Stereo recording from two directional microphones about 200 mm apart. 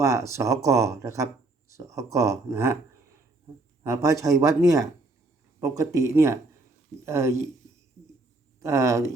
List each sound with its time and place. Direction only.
0.0 s speech: 15° right (ahead or behind)
3.8 s speech: 15° right (ahead or behind)
8.6 s speech: 15° right (ahead or behind)